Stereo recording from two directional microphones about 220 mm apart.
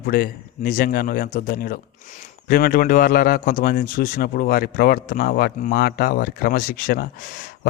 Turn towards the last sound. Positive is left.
turn(degrees=45)  # may be behind; listen again after turning